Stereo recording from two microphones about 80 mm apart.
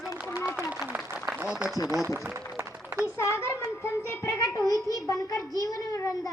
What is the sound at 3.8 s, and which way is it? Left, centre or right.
A child's voice, left.